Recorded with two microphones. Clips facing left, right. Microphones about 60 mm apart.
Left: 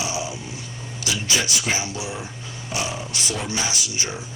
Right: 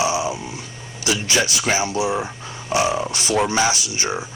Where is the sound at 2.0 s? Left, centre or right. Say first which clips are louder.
Right 10 dB; right.